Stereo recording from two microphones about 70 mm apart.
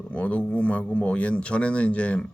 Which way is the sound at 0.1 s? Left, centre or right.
Centre.